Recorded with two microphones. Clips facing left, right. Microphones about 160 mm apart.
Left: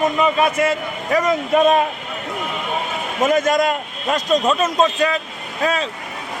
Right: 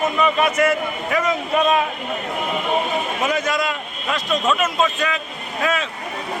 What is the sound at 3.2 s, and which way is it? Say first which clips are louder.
A man's voice: left 9 dB; 45° left (ahead or behind).